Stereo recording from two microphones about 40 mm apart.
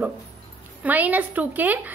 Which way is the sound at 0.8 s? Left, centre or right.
Right.